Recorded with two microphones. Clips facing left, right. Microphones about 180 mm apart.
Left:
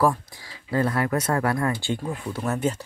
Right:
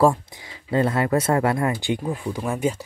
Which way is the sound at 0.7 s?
25° right (ahead or behind).